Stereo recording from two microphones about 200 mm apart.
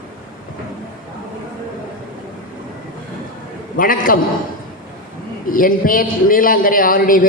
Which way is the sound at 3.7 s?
45° left (ahead or behind).